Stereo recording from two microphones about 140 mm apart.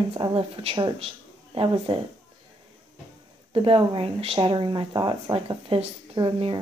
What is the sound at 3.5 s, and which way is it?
Speech, 40° right (ahead or behind).